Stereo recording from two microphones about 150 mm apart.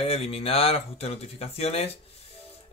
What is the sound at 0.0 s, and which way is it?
Speech, 40° left (ahead or behind).